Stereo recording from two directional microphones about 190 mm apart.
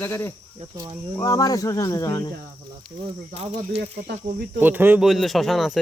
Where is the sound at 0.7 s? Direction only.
20° right (ahead or behind).